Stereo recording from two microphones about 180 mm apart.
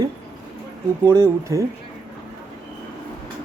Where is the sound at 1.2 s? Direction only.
15° right (ahead or behind).